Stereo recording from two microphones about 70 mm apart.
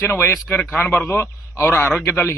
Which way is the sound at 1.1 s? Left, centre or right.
Left.